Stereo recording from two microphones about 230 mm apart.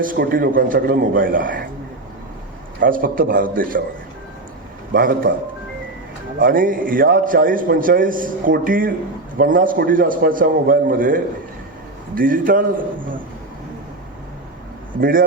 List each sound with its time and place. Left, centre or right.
0.0 s a man's voice: right
2.8 s a man's voice: right
4.9 s a man's voice: right
6.4 s a man's voice: right